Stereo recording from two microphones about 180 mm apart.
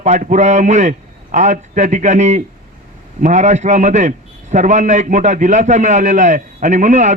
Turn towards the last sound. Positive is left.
turn(degrees=-40)  # may be behind; listen again after turning